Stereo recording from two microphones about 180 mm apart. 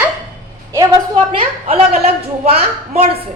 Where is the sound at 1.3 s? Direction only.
30° right (ahead or behind).